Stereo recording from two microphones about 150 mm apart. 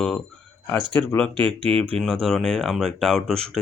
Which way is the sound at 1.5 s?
35° right (ahead or behind).